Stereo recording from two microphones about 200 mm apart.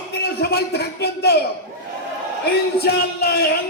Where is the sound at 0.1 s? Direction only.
50° left (ahead or behind).